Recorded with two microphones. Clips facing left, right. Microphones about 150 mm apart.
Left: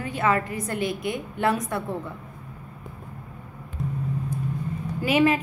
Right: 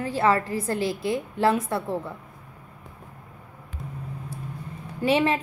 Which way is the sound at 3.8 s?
Centre (ahead or behind).